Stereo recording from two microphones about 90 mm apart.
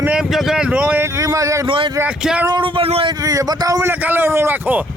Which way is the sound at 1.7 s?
65° right (ahead or behind).